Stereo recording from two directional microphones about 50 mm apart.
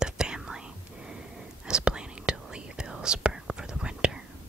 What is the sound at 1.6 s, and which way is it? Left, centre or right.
Whispering, centre.